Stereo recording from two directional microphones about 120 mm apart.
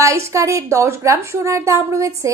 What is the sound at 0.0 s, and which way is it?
Speech, 25° right (ahead or behind).